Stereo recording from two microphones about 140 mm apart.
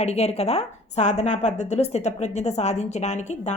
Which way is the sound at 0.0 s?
50° left (ahead or behind).